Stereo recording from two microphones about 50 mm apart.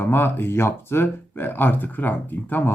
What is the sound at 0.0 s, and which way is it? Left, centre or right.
Speech, left.